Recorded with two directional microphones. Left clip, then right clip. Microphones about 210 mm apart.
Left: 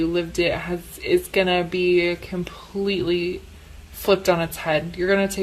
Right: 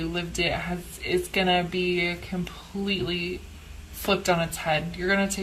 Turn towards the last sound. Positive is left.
turn(degrees=45)  # may be behind; listen again after turning